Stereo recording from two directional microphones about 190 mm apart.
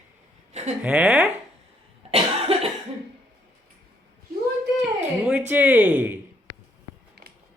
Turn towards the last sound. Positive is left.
turn(degrees=-10)  # may be behind; listen again after turning